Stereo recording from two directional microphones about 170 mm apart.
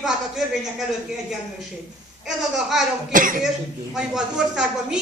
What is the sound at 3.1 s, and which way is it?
Speech, 50° right (ahead or behind).